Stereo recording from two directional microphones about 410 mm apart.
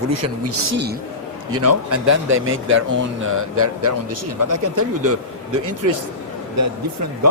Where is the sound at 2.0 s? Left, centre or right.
Right.